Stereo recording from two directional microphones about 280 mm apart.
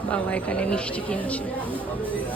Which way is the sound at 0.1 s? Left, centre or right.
Centre.